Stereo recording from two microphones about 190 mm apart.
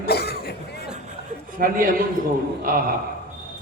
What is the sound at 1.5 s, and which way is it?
A man's voice, 45° right (ahead or behind).